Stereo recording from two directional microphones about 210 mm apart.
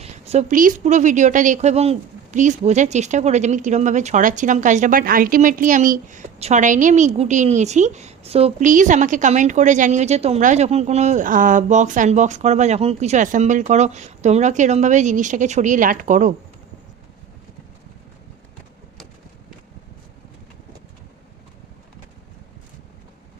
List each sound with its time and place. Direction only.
0.0 s a woman's voice: 30° right (ahead or behind)